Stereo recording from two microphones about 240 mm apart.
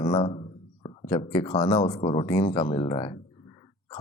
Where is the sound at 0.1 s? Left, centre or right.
Centre.